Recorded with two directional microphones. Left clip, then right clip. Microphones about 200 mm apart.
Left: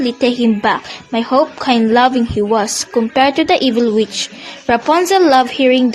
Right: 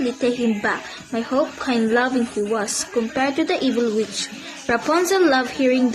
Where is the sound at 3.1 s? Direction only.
35° left (ahead or behind).